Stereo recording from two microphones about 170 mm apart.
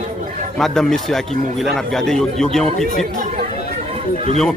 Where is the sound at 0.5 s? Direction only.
5° left (ahead or behind).